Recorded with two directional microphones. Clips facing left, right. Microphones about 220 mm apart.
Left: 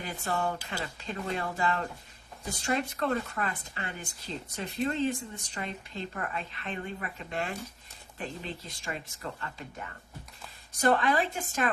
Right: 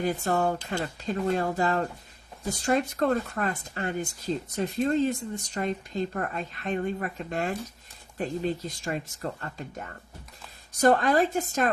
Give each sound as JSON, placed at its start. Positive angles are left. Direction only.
{"t": 0.0, "sound": "speech", "side_deg": -40}
{"t": 10.8, "sound": "speech", "side_deg": -40}